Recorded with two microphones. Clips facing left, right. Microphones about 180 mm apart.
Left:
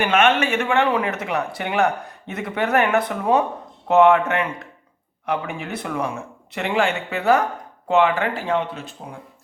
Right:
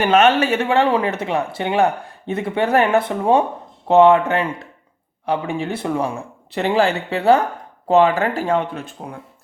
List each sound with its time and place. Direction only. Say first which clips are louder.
0.0 s speech: right 4 dB; 35° right (ahead or behind)